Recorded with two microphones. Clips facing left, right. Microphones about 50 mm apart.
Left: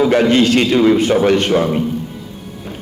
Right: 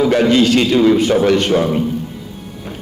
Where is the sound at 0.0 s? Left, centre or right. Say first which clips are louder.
Even; left.